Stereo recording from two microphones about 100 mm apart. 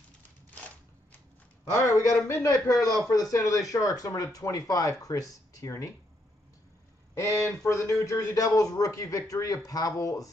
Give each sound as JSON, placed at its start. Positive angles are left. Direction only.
{"t": 1.7, "sound": "speech", "side_deg": 30}
{"t": 7.4, "sound": "speech", "side_deg": 30}